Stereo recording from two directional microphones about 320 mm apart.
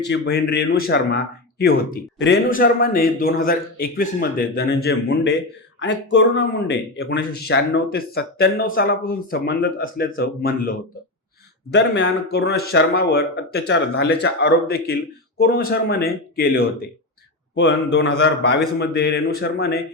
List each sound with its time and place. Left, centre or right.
0.1 s speech: left